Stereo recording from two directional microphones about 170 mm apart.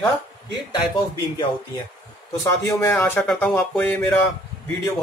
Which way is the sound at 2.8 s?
15° left (ahead or behind).